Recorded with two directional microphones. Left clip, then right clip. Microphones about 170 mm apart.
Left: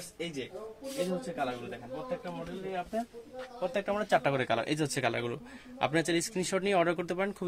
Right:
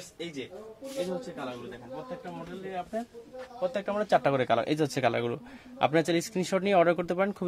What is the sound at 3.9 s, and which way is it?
A man's voice, 55° right (ahead or behind).